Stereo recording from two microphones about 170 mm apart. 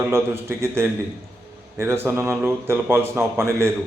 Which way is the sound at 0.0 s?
15° right (ahead or behind).